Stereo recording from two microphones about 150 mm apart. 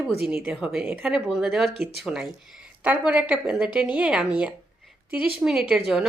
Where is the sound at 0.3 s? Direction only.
5° right (ahead or behind).